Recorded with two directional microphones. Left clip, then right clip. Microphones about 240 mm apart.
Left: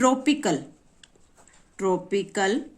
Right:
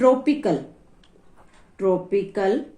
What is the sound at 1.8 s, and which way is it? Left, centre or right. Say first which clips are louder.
Speech: right 4 dB; left.